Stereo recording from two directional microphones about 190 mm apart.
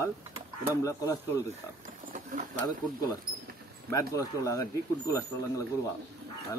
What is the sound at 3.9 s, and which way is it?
Speech, 15° left (ahead or behind).